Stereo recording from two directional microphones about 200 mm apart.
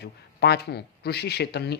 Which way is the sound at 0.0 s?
55° left (ahead or behind).